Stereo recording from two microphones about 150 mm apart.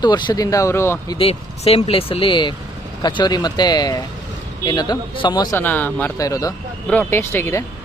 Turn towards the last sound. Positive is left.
turn(degrees=20)  # may be behind; listen again after turning